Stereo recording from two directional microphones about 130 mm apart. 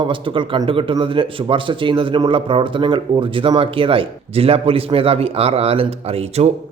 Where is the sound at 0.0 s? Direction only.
40° right (ahead or behind).